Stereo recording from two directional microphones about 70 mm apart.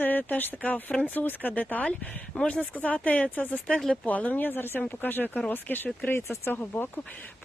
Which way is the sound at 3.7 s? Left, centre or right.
Centre.